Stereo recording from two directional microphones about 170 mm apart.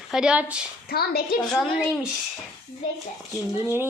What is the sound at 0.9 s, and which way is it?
Speech, 65° left (ahead or behind).